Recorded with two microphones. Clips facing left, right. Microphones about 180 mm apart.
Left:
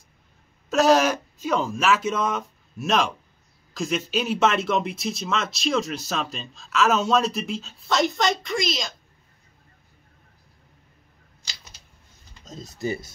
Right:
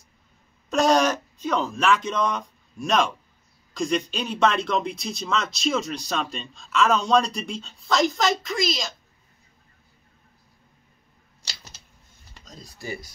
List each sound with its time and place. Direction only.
0.7 s speech: 5° left (ahead or behind)
12.4 s speech: 25° left (ahead or behind)